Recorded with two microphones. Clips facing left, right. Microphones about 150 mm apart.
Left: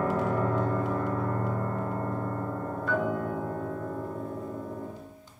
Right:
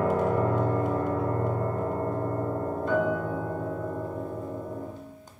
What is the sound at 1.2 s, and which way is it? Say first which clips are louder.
Gong: right 3 dB; 30° right (ahead or behind).